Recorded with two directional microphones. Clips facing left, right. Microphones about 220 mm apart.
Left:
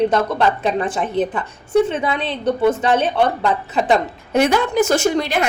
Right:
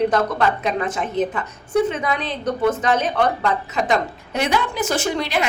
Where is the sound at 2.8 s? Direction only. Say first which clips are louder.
Left 3 dB; 30° left (ahead or behind).